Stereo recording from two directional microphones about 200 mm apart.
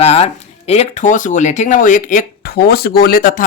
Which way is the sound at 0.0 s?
30° left (ahead or behind).